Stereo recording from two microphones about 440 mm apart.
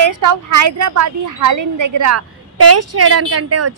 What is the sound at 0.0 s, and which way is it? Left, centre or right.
A woman's voice, right.